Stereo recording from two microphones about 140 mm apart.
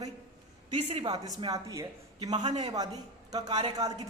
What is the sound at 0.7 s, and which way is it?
Speech, 45° right (ahead or behind).